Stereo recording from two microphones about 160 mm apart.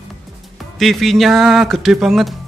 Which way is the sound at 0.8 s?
Centre (ahead or behind).